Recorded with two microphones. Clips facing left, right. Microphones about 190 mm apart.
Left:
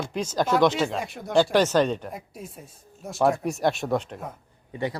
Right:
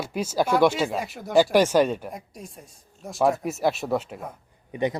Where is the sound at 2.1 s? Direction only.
5° left (ahead or behind).